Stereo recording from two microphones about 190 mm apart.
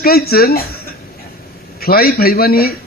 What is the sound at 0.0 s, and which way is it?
Speech, 50° left (ahead or behind).